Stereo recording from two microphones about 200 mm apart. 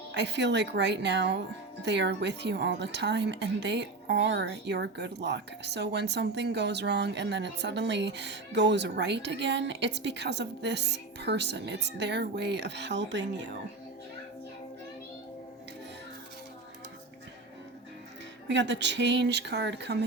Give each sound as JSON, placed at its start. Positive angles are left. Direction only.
{"t": 0.1, "sound": "speech", "side_deg": -60}
{"t": 18.4, "sound": "speech", "side_deg": -60}